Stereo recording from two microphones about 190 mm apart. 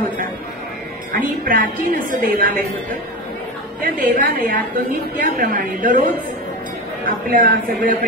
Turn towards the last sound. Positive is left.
turn(degrees=-45)  # may be behind; listen again after turning